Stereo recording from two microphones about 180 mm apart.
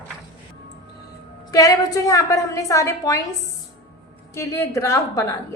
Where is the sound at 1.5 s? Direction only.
20° left (ahead or behind).